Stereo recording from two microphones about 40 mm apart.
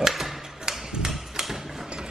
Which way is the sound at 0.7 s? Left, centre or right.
Centre.